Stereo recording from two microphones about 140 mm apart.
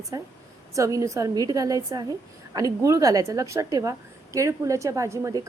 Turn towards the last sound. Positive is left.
turn(degrees=-25)  # may be behind; listen again after turning